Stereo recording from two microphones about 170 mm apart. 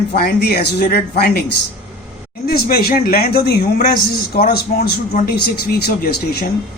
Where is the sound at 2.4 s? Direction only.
65° left (ahead or behind).